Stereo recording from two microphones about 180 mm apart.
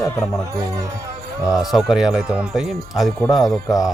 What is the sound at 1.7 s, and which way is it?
Speech, centre (ahead or behind).